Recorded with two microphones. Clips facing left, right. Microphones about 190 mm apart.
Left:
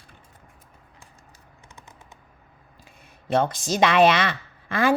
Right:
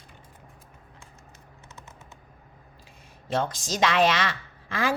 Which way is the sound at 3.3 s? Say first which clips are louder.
Left 5 dB; 60° left (ahead or behind).